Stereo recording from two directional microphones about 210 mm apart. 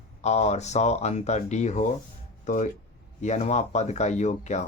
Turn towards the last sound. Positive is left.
turn(degrees=35)  # may be behind; listen again after turning